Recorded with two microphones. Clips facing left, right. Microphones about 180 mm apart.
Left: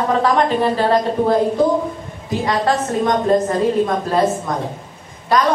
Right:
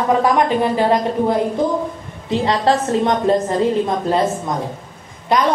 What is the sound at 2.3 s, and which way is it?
Speech, 25° right (ahead or behind).